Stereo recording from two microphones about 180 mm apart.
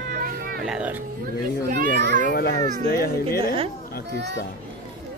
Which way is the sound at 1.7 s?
70° right (ahead or behind).